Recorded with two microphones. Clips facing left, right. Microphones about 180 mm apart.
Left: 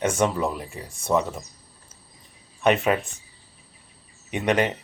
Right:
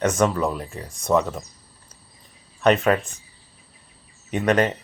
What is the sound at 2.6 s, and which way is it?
Speech, 15° left (ahead or behind).